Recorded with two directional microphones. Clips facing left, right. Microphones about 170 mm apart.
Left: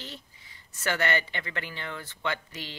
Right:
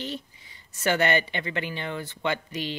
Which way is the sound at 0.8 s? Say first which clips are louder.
Right 5 dB; 20° right (ahead or behind).